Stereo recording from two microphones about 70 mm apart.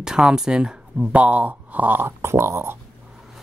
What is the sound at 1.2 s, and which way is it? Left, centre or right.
Speech, right.